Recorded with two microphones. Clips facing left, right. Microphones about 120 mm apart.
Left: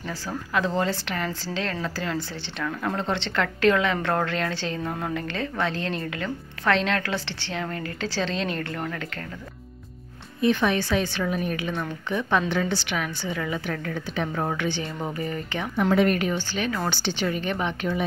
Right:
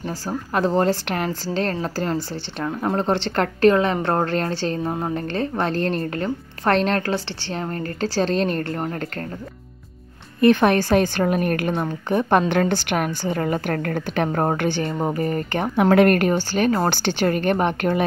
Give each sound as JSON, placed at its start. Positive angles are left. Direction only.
{"t": 0.6, "sound": "a woman's voice", "side_deg": -45}
{"t": 10.4, "sound": "a woman's voice", "side_deg": -55}
{"t": 16.5, "sound": "a woman's voice", "side_deg": -50}